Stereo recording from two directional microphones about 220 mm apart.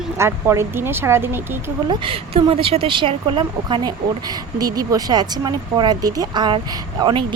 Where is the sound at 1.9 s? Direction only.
25° right (ahead or behind).